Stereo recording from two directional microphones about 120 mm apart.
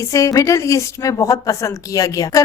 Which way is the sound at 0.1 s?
30° left (ahead or behind).